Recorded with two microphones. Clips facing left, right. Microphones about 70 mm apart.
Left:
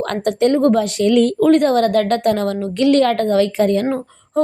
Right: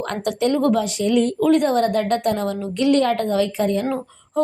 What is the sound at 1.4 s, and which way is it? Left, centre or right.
A woman's voice, left.